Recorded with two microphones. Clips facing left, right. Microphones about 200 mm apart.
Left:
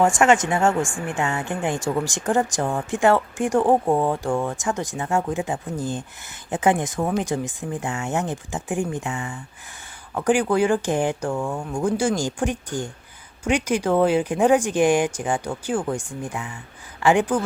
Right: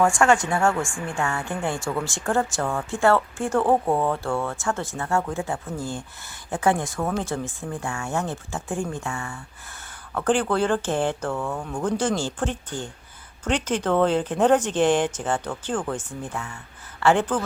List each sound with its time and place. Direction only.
0.0 s speech: 20° left (ahead or behind)